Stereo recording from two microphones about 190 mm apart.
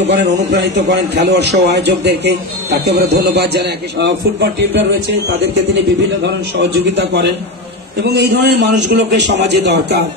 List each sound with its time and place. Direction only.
0.0 s a man's voice: 65° right (ahead or behind)
6.2 s a man's voice: 65° right (ahead or behind)